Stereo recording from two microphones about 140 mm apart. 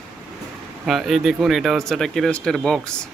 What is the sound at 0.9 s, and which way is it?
Speech, centre (ahead or behind).